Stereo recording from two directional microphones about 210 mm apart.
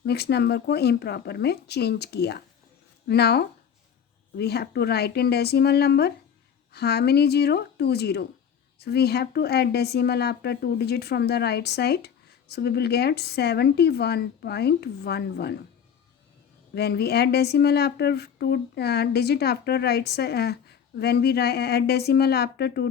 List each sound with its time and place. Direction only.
0.0 s a woman's voice: 50° left (ahead or behind)
16.7 s a woman's voice: 50° left (ahead or behind)